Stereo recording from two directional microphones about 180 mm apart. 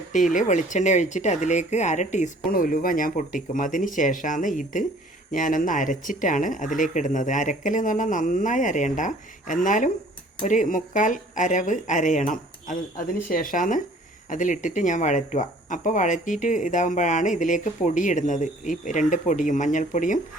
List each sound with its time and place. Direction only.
0.1 s speech: 45° left (ahead or behind)